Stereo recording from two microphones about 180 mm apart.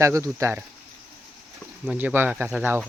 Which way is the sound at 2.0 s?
10° right (ahead or behind).